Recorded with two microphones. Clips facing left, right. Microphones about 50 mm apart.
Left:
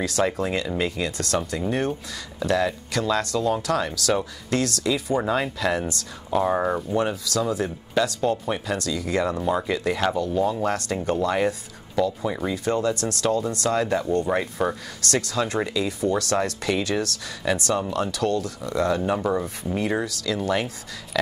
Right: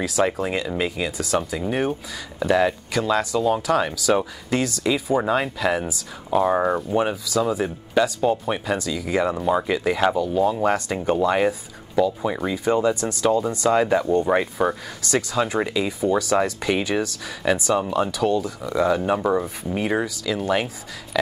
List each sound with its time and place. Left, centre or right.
0.0 s speech: centre
17.8 s speech: right
18.1 s speech: centre